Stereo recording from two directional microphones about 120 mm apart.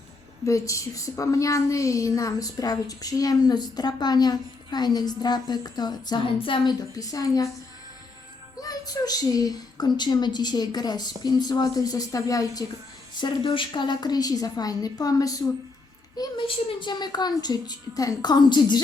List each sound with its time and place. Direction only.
0.4 s speech: 25° left (ahead or behind); by 6.7 s 45° left (ahead or behind)
6.9 s a woman's voice: 30° left (ahead or behind)
8.6 s speech: 30° left (ahead or behind)
13.1 s speech: 40° left (ahead or behind)